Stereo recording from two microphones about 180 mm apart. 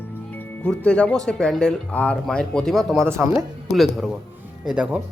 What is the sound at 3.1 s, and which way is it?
Speech, 15° right (ahead or behind).